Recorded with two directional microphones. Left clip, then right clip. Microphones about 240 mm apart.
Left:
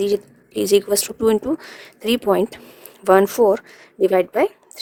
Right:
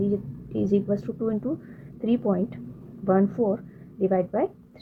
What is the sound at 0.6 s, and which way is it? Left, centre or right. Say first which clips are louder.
A woman's voice: left 9 dB; left.